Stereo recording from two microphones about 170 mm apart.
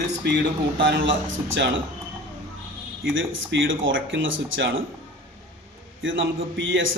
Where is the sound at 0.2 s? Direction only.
75° right (ahead or behind).